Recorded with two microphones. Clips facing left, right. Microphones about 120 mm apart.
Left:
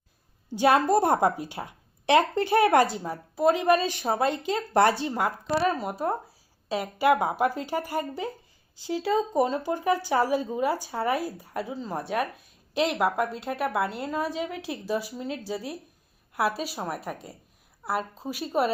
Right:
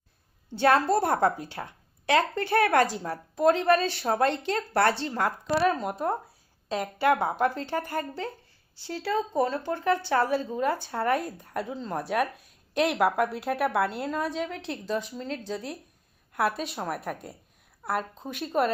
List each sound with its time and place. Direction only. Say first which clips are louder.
0.5 s a woman's voice: left 1 dB; 10° left (ahead or behind)
2.8 s speech: even; centre (ahead or behind)
4.7 s a woman's voice: left 3 dB; 15° left (ahead or behind)